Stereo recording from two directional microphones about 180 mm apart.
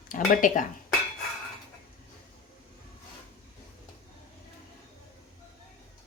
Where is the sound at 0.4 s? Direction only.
45° left (ahead or behind).